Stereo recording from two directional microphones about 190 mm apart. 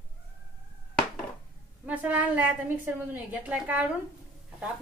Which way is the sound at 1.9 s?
10° right (ahead or behind).